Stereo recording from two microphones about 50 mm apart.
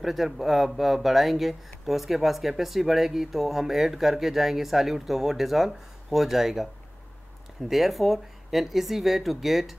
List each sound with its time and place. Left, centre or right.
0.0 s speech: centre